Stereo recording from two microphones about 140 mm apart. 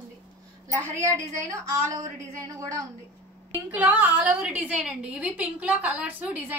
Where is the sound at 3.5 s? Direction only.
10° right (ahead or behind).